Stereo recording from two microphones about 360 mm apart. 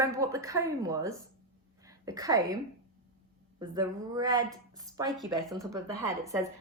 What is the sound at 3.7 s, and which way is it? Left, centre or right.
Speech, centre.